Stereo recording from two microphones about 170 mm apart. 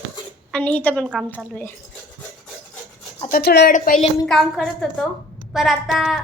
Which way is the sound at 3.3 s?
70° left (ahead or behind).